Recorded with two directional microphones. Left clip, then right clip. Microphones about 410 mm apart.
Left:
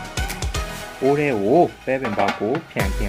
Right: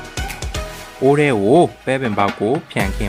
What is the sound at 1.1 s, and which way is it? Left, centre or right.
Speech, right.